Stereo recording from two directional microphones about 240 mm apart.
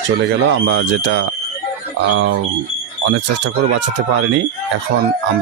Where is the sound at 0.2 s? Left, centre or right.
Right.